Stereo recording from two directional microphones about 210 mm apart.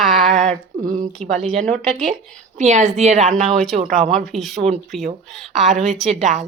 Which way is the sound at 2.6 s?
35° right (ahead or behind).